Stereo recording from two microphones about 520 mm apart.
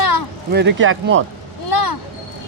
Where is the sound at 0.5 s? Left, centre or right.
Right.